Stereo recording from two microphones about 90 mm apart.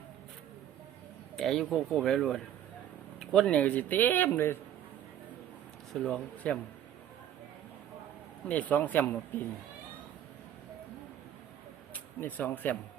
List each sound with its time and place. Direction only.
1.4 s speech: 5° left (ahead or behind); by 4.5 s 20° left (ahead or behind)
5.9 s speech: 10° left (ahead or behind)
8.4 s speech: 20° left (ahead or behind)
12.2 s speech: 20° left (ahead or behind)